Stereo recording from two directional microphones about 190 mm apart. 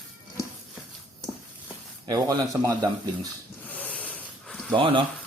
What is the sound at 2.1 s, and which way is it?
Speech, 20° right (ahead or behind).